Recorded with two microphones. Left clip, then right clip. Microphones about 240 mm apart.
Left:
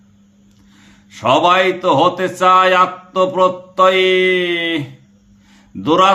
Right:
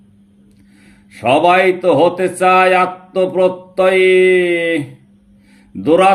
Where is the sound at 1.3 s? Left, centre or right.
Left.